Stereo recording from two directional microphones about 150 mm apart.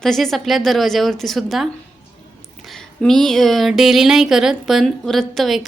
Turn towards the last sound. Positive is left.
turn(degrees=0)  # may be behind; listen again after turning